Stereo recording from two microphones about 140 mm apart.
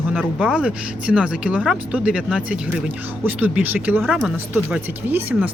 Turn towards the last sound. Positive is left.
turn(degrees=-10)  # may be behind; listen again after turning